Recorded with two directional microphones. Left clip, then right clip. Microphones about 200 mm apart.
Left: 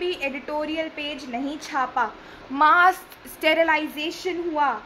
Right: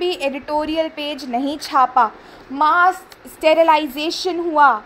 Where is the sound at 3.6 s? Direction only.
30° right (ahead or behind).